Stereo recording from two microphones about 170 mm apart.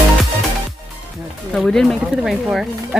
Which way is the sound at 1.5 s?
Centre (ahead or behind).